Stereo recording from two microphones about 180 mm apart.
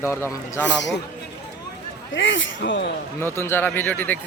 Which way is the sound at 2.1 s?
90° left.